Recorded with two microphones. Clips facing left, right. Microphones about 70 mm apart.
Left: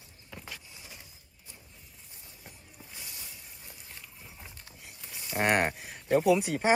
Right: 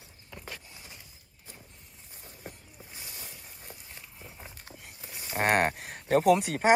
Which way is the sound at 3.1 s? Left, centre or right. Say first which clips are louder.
Right 2 dB; right.